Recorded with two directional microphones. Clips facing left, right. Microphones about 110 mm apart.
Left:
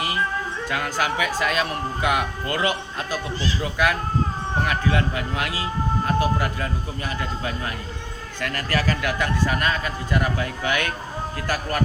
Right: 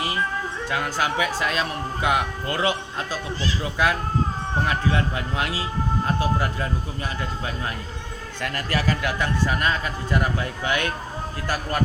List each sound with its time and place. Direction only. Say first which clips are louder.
0.7 s speech: even; 25° right (ahead or behind)
4.6 s speech: left 1 dB; 25° right (ahead or behind)